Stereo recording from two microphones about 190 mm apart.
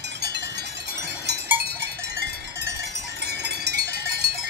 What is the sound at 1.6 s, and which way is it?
Cowbell, 60° right (ahead or behind).